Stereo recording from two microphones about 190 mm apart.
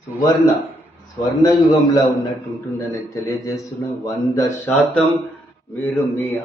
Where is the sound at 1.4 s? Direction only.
20° left (ahead or behind).